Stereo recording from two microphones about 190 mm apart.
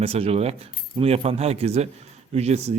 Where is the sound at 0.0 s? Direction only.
30° right (ahead or behind).